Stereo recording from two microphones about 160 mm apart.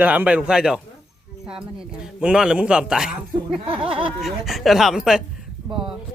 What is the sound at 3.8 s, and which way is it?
Speech, 35° right (ahead or behind).